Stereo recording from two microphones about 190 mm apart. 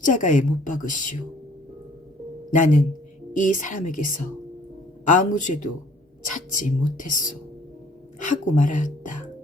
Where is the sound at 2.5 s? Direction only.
40° left (ahead or behind).